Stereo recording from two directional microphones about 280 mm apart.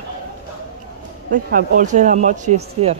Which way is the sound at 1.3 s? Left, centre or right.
Right.